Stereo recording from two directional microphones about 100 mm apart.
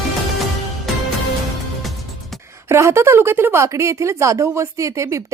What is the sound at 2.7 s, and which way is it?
A woman's voice, 30° right (ahead or behind).